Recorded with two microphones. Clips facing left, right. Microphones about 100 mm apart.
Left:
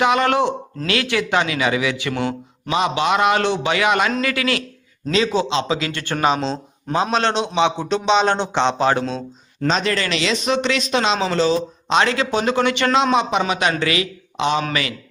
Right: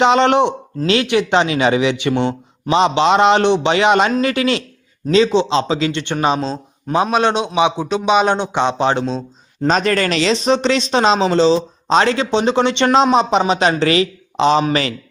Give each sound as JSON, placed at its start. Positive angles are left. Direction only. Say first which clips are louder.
{"t": 0.0, "sound": "speech", "louder": "right 4 dB", "side_deg": -30}
{"t": 6.4, "sound": "a man's voice", "louder": "right 1 dB", "side_deg": -5}
{"t": 9.6, "sound": "speech", "louder": "right 4 dB", "side_deg": -45}